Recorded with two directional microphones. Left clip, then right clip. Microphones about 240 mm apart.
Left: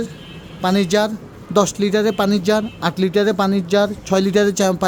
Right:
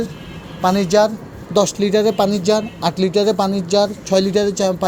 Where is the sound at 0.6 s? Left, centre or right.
Centre.